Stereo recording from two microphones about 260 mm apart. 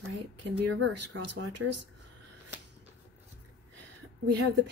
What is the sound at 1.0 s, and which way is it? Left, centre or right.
Speech, right.